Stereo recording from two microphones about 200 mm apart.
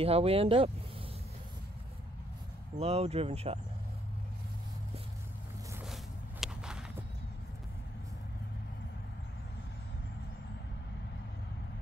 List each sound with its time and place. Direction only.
0.0 s speech: 30° right (ahead or behind)
2.8 s speech: 30° right (ahead or behind)
6.4 s a sound: 5° right (ahead or behind)